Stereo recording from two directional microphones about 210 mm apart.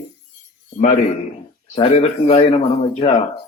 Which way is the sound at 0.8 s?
35° left (ahead or behind).